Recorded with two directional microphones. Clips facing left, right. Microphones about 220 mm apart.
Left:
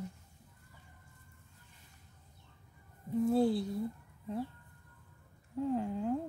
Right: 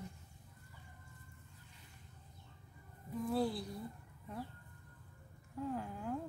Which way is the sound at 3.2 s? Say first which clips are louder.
Left 7 dB; 25° left (ahead or behind).